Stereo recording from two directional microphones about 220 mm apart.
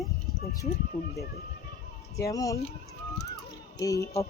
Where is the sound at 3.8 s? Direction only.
15° left (ahead or behind).